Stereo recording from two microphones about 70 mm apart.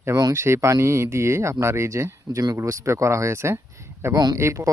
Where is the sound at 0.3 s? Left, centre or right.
Right.